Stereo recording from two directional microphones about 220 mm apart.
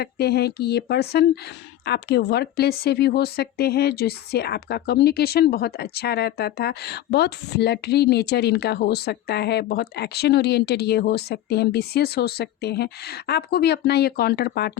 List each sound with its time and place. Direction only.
0.0 s a woman's voice: 45° left (ahead or behind)